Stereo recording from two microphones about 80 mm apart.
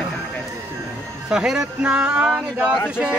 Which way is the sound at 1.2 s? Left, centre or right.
Centre.